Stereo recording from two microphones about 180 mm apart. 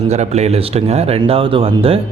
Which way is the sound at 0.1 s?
35° right (ahead or behind).